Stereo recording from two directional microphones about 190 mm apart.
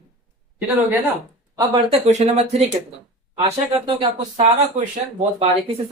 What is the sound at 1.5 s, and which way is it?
Speech, 30° right (ahead or behind).